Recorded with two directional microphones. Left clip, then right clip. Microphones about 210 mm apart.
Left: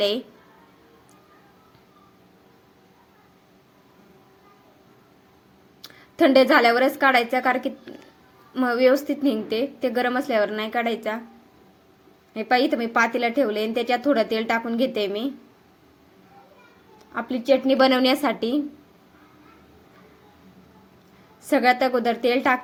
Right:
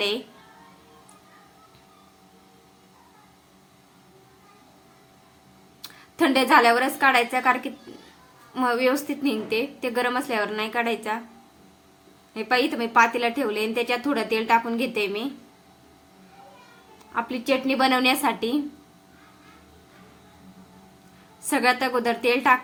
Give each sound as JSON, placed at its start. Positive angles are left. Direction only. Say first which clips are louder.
{"t": 5.8, "sound": "a woman's voice", "louder": "left 4 dB", "side_deg": 15}
{"t": 12.3, "sound": "a woman's voice", "louder": "left 2 dB", "side_deg": 15}
{"t": 17.1, "sound": "a woman's voice", "louder": "left 3 dB", "side_deg": 15}
{"t": 21.4, "sound": "a woman's voice", "louder": "left 3 dB", "side_deg": 15}